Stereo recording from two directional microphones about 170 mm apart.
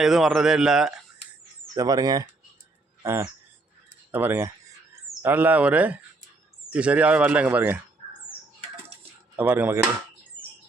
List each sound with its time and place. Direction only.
0.0 s speech: centre (ahead or behind)
1.7 s speech: 20° right (ahead or behind)
3.0 s a sound: 15° right (ahead or behind)
4.1 s speech: 10° right (ahead or behind)
9.3 s speech: 10° right (ahead or behind)